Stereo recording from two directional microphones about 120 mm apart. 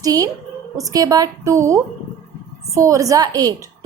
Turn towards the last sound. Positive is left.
turn(degrees=-30)  # may be behind; listen again after turning